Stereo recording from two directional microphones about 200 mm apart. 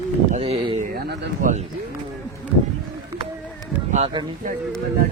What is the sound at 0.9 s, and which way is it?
Speech, 50° right (ahead or behind).